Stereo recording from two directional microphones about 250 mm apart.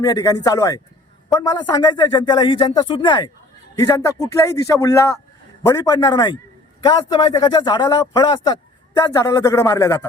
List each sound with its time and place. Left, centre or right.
0.0 s speech: centre